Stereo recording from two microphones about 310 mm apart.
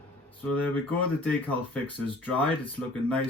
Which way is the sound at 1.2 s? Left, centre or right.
Centre.